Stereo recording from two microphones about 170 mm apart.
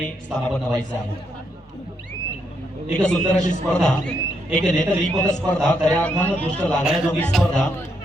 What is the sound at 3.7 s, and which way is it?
Speech, 5° left (ahead or behind).